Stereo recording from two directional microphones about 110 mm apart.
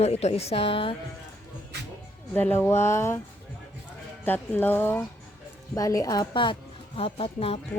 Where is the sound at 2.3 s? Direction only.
15° left (ahead or behind).